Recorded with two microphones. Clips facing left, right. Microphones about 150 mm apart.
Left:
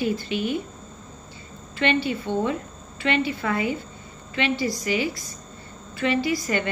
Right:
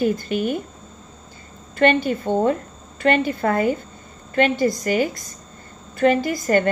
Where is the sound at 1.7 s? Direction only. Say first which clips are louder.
Right 6 dB; 45° right (ahead or behind).